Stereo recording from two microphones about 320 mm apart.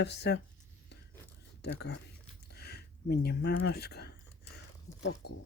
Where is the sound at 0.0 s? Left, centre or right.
Left.